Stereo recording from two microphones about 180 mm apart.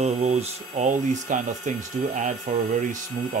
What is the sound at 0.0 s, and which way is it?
Speech, 35° right (ahead or behind).